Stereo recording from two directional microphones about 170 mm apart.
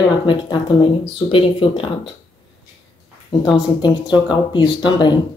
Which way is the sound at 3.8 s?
25° left (ahead or behind).